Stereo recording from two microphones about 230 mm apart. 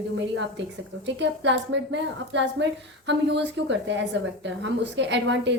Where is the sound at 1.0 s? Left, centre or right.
Right.